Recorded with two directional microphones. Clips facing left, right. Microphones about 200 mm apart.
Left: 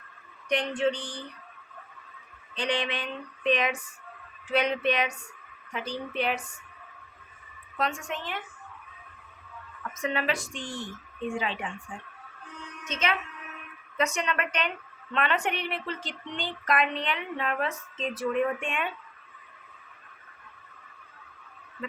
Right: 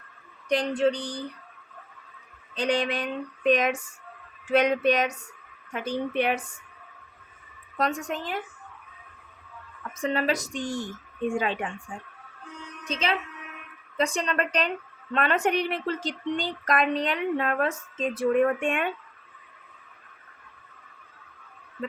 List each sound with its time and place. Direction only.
0.4 s speech: 35° right (ahead or behind)
2.6 s speech: 45° right (ahead or behind)
7.8 s speech: 40° right (ahead or behind)
9.9 s speech: 35° right (ahead or behind); by 11.7 s 50° right (ahead or behind)
12.8 s a woman's voice: 30° right (ahead or behind); by 18.9 s 50° right (ahead or behind)